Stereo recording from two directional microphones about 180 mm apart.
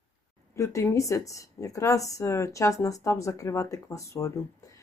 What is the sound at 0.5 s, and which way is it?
Speech, 15° left (ahead or behind).